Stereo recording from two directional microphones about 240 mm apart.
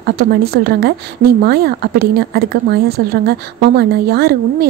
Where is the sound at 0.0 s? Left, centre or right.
Right.